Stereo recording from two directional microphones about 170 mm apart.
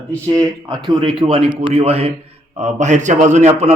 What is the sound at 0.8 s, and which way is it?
A man's voice, 30° right (ahead or behind).